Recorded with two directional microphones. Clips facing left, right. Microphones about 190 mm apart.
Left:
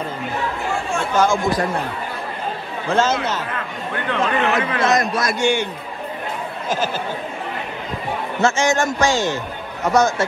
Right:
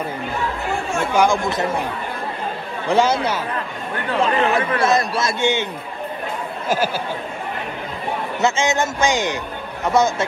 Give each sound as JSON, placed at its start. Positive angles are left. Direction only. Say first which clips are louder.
{"t": 1.1, "sound": "speech", "louder": "even", "side_deg": -15}
{"t": 2.9, "sound": "speech", "louder": "right 2 dB", "side_deg": -15}
{"t": 4.2, "sound": "a man's voice", "louder": "right 2 dB", "side_deg": -30}
{"t": 8.4, "sound": "a man's voice", "louder": "left 2 dB", "side_deg": -20}